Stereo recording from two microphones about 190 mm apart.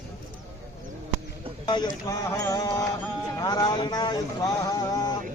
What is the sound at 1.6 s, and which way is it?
Speech, 25° left (ahead or behind).